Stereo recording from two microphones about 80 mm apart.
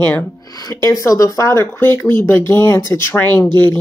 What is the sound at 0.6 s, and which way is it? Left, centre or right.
Speech, left.